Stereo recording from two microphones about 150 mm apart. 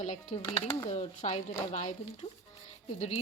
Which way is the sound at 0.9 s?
50° left (ahead or behind).